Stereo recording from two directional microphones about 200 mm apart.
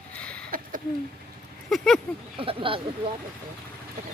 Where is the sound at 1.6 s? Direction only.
Centre (ahead or behind).